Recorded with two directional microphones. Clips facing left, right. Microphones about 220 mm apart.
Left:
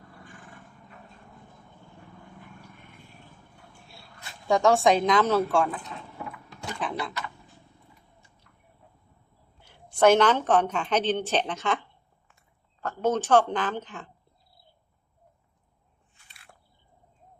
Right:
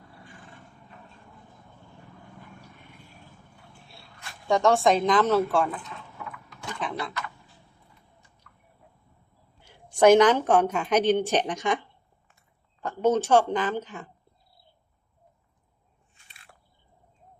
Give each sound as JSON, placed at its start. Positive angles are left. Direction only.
{"t": 3.9, "sound": "a woman's voice", "side_deg": 0}
{"t": 6.7, "sound": "typing", "side_deg": 0}
{"t": 9.6, "sound": "a woman's voice", "side_deg": -15}